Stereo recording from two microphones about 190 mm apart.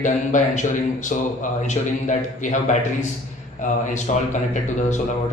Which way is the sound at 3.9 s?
40° left (ahead or behind).